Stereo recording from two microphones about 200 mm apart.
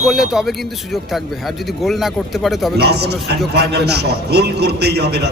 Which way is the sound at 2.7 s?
55° right (ahead or behind).